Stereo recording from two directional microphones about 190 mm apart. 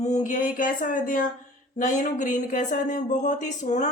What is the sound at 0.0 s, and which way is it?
A woman's voice, 40° left (ahead or behind).